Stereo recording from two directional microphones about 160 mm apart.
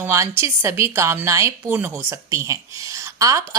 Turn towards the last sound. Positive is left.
turn(degrees=-20)  # may be behind; listen again after turning